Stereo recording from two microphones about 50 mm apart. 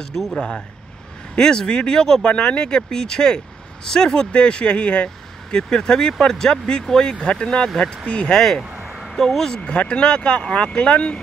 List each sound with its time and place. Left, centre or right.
0.1 s speech: centre
0.4 s speech: centre
8.4 s speech: centre
9.0 s a sound: centre
9.6 s speech: left